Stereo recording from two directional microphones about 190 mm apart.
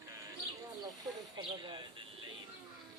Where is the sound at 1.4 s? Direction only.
25° right (ahead or behind).